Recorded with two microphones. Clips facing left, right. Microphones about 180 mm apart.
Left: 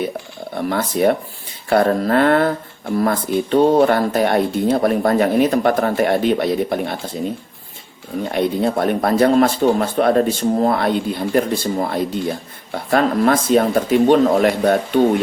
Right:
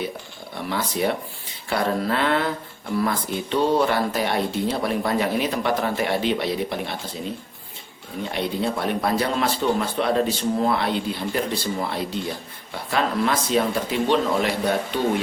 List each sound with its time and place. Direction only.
0.5 s speech: 50° left (ahead or behind)
8.2 s speech: 50° left (ahead or behind)